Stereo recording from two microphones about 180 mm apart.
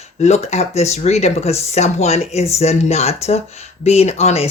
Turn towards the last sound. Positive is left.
turn(degrees=35)  # may be behind; listen again after turning